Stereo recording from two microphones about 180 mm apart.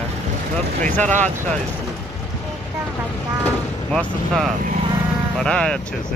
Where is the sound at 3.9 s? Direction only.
Centre (ahead or behind).